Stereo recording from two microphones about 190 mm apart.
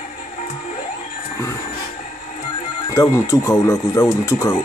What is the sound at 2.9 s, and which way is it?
Speech, 15° left (ahead or behind).